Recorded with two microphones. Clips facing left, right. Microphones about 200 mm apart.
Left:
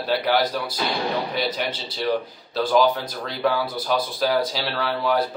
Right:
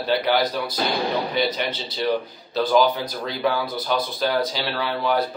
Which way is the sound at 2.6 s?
Centre (ahead or behind).